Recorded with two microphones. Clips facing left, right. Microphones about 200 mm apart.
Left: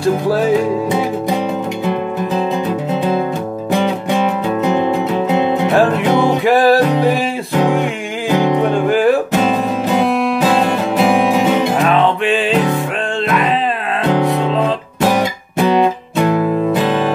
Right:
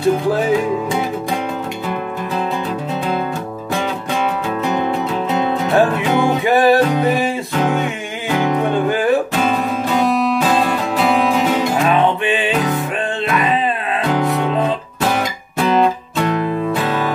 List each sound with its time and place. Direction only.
6.4 s music: centre (ahead or behind)
7.5 s music: 15° left (ahead or behind)
8.8 s music: centre (ahead or behind)
9.3 s music: 20° left (ahead or behind)
11.0 s music: 20° left (ahead or behind)